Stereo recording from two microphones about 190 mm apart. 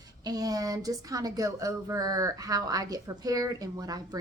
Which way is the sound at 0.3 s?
20° right (ahead or behind).